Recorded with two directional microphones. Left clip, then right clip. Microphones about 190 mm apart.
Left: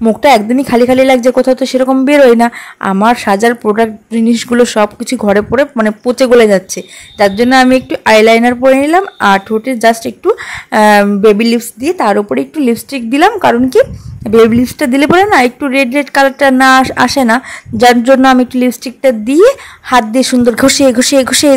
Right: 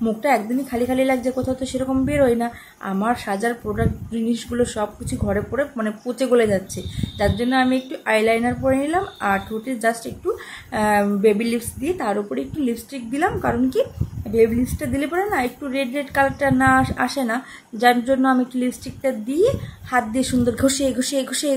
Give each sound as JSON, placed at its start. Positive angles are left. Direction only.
{"t": 0.0, "sound": "a woman's voice", "side_deg": 50}